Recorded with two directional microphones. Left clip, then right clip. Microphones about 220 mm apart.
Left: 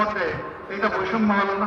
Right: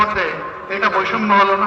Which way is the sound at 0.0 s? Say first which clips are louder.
Right 7 dB; 50° left (ahead or behind).